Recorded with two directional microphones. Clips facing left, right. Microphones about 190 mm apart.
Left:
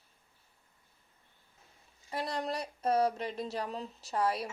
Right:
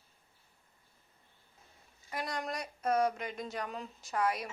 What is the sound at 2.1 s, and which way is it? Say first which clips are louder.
A woman's voice: left 3 dB; 30° left (ahead or behind).